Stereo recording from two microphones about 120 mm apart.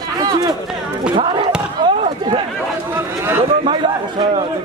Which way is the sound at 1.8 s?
45° right (ahead or behind).